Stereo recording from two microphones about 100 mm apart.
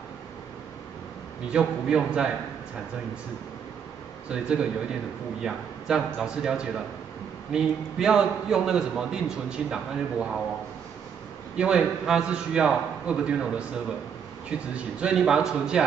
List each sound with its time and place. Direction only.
1.5 s a man's voice: 10° right (ahead or behind)
4.3 s a man's voice: 10° right (ahead or behind)
11.5 s a man's voice: 10° right (ahead or behind)